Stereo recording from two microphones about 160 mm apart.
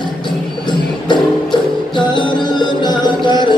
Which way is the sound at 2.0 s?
30° left (ahead or behind).